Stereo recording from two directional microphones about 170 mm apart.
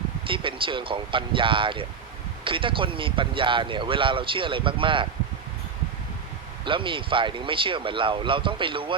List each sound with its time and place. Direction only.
0.3 s speech: 30° right (ahead or behind)
6.7 s speech: 30° right (ahead or behind)